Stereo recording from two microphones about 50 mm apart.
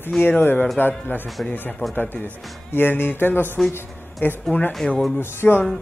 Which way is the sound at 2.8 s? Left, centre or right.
Left.